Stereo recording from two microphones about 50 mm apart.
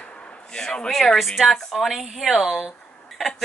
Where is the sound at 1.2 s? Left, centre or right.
Centre.